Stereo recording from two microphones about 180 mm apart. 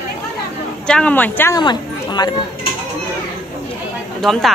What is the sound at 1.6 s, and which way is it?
Speech, 25° left (ahead or behind).